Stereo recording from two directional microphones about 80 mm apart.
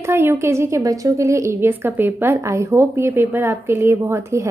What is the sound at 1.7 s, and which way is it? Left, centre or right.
Speech, right.